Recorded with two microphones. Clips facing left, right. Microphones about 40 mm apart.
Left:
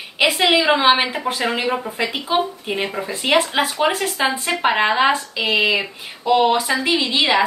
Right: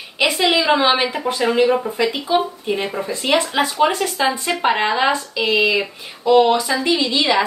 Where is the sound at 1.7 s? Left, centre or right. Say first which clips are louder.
Right 4 dB; centre.